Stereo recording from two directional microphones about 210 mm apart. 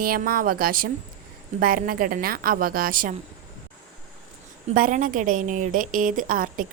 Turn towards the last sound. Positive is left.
turn(degrees=-40)  # may be behind; listen again after turning